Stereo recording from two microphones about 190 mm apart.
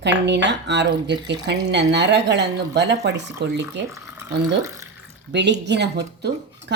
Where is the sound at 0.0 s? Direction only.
65° right (ahead or behind).